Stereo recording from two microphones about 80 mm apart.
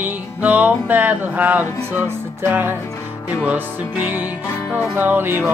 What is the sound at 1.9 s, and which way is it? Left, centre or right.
Music, right.